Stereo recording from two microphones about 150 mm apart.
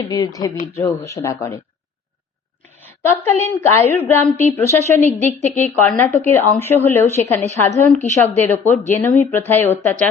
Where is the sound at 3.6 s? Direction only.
15° left (ahead or behind).